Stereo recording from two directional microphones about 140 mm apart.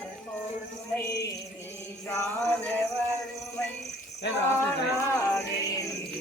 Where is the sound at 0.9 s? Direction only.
20° left (ahead or behind).